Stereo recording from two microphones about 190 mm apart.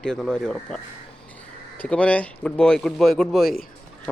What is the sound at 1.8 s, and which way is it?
Speech, 5° left (ahead or behind).